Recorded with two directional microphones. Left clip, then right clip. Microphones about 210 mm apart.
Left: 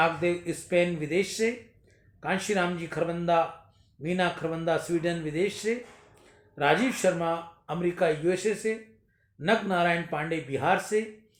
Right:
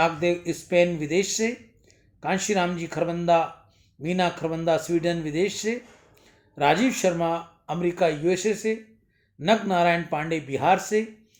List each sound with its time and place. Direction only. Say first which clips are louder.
0.0 s speech: right 3 dB; 35° right (ahead or behind)